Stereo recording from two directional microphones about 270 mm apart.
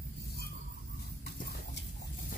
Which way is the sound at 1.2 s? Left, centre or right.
Left.